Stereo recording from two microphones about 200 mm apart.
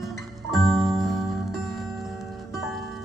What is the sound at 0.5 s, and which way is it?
Music, centre (ahead or behind).